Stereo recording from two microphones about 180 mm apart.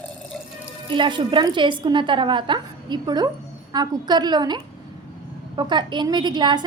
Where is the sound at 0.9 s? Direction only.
25° right (ahead or behind).